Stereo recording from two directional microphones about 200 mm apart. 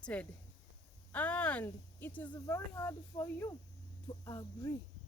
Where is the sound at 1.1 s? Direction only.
5° left (ahead or behind).